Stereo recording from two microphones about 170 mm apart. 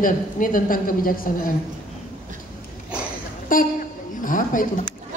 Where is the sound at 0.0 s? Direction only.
50° left (ahead or behind).